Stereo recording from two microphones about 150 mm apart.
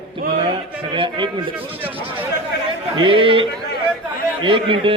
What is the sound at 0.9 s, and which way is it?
Speech, 35° right (ahead or behind).